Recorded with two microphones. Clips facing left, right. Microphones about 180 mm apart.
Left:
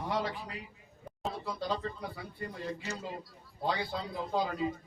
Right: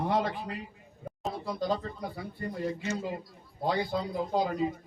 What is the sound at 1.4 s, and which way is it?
Speech, 45° right (ahead or behind).